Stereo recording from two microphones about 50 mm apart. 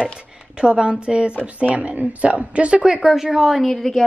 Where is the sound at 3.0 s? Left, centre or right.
Centre.